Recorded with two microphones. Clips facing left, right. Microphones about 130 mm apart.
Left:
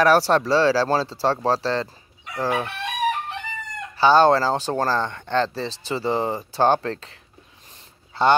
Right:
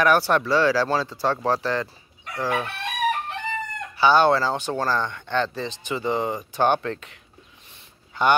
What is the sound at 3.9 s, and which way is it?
Speech, 35° left (ahead or behind).